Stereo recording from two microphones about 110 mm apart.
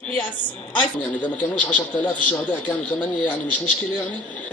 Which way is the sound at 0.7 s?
15° left (ahead or behind).